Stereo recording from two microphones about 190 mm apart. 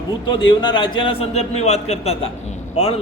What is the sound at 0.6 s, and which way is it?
A man's voice, 25° left (ahead or behind).